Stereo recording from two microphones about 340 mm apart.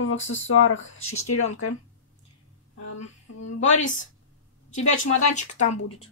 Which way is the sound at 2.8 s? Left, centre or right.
Left.